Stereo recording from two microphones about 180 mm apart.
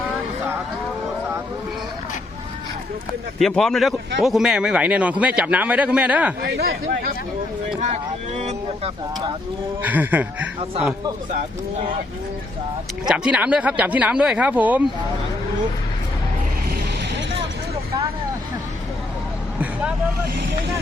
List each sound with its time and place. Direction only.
3.3 s a man's voice: centre (ahead or behind)
6.4 s speech: 60° right (ahead or behind)
8.4 s a sound: 35° right (ahead or behind)
9.8 s a man's voice: 10° right (ahead or behind)
13.1 s a man's voice: 5° right (ahead or behind)